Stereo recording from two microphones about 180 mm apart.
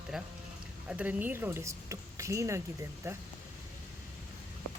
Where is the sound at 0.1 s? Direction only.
Centre (ahead or behind).